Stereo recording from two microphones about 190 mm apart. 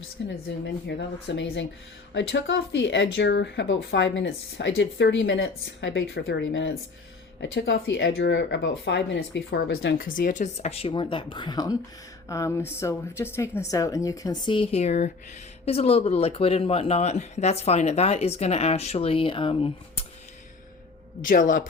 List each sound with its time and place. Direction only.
0.4 s speech: 65° left (ahead or behind)
10.0 s a woman's voice: 45° left (ahead or behind); by 19.7 s 30° left (ahead or behind)
21.2 s speech: 45° left (ahead or behind)